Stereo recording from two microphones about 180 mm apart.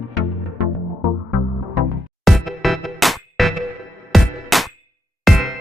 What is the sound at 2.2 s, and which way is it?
Music, centre (ahead or behind).